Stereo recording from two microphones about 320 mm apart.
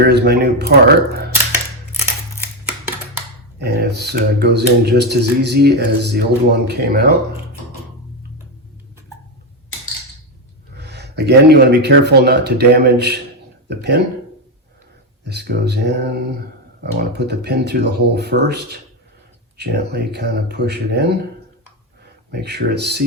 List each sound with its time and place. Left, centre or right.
0.0 s speech: right
3.6 s speech: right
10.8 s speech: right
15.2 s speech: right
22.3 s speech: right